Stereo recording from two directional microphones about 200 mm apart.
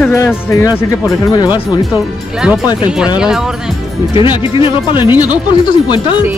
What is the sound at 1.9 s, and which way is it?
Speech, 5° right (ahead or behind).